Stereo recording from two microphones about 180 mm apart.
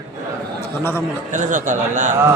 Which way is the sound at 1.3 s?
45° right (ahead or behind).